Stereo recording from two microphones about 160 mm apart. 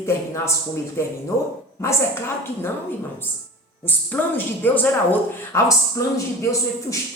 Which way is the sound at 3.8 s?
10° left (ahead or behind).